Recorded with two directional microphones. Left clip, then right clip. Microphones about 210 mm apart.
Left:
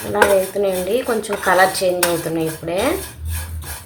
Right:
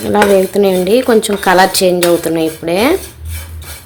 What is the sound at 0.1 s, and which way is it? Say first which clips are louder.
Speech: right 5 dB; 50° right (ahead or behind).